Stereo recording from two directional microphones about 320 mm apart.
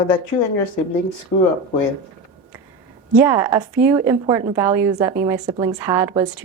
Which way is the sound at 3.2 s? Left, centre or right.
Centre.